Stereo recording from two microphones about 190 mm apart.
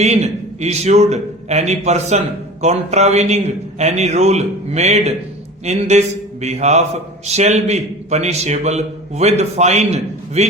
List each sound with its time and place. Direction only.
0.0 s a man's voice: 35° right (ahead or behind)